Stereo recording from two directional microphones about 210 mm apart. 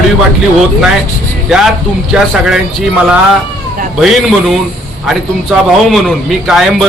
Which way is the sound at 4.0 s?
Centre (ahead or behind).